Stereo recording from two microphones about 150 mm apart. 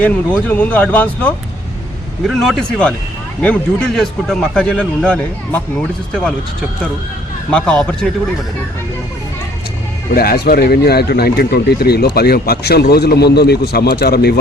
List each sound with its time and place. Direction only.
0.4 s a man's voice: 10° left (ahead or behind)
7.5 s a man's voice: 5° left (ahead or behind)
10.2 s speech: 90° left